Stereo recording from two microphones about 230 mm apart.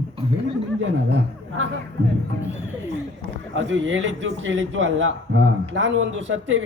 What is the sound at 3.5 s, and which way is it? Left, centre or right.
A man's voice, right.